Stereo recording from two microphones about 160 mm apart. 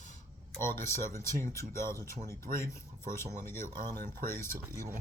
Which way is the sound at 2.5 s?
35° right (ahead or behind).